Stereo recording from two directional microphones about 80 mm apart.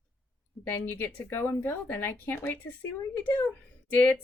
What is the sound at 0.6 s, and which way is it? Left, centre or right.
Speech, left.